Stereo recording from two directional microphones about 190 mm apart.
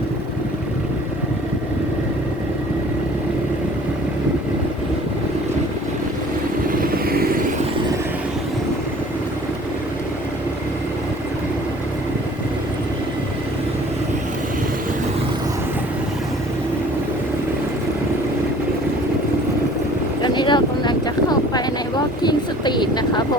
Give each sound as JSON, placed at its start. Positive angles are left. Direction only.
{"t": 6.7, "sound": "vehicle", "side_deg": -50}
{"t": 20.2, "sound": "a sound", "side_deg": 25}
{"t": 22.2, "sound": "vehicle", "side_deg": 20}